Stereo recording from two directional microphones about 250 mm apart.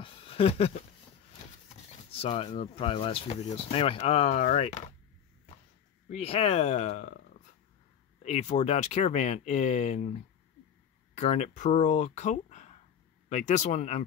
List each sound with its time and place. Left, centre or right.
0.0 s a sound: left
2.1 s speech: left
6.0 s speech: left
8.2 s speech: left
11.1 s speech: left